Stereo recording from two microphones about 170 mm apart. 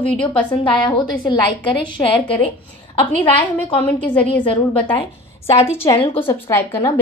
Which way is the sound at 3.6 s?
30° left (ahead or behind).